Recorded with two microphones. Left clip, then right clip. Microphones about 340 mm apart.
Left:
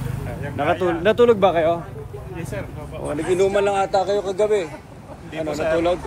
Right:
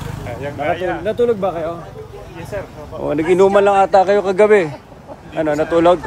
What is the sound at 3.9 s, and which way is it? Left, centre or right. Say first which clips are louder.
Speech: right 8 dB; right.